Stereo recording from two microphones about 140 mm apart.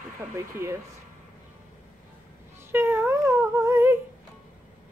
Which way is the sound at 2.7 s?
15° right (ahead or behind).